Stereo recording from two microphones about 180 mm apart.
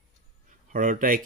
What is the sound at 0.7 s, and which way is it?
Speech, 50° right (ahead or behind).